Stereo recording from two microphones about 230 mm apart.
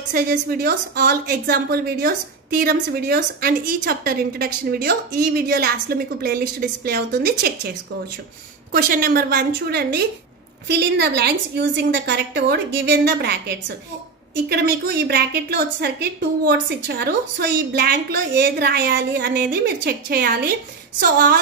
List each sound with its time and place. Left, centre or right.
0.1 s a woman's voice: right
8.7 s a woman's voice: right